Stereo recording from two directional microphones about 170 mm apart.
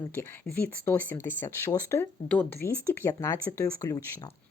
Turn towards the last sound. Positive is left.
turn(degrees=20)  # may be behind; listen again after turning